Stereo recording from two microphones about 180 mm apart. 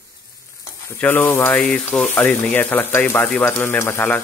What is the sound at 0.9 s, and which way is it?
Speech, 10° left (ahead or behind).